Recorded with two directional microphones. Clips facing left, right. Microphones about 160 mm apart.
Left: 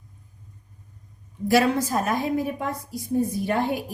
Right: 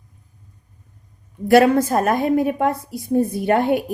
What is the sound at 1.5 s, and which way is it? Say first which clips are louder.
A woman's voice: right 7 dB; 55° right (ahead or behind).